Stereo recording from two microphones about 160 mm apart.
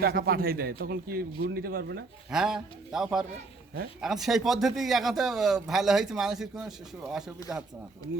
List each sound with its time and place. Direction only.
0.0 s a man's voice: 70° right (ahead or behind)
2.3 s speech: 5° right (ahead or behind)